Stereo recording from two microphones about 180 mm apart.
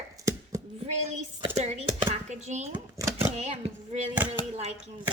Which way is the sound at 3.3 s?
40° right (ahead or behind).